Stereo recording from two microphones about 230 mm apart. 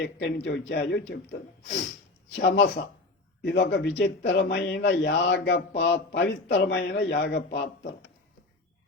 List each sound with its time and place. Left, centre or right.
0.0 s a man's voice: left